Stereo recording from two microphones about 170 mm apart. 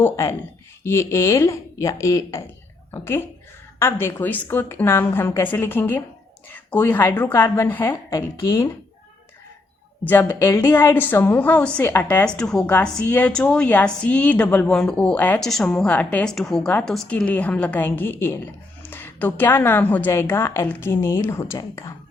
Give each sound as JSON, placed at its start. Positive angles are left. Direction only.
{"t": 0.0, "sound": "a woman's voice", "side_deg": 15}
{"t": 10.0, "sound": "a woman's voice", "side_deg": 10}